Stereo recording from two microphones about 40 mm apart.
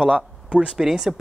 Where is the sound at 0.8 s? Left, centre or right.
Centre.